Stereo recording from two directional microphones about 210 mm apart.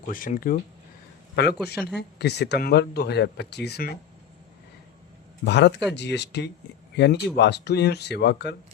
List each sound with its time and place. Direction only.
0.1 s speech: 40° left (ahead or behind)
1.5 s speech: 5° left (ahead or behind)
2.0 s speech: 50° left (ahead or behind)
5.5 s speech: 55° left (ahead or behind)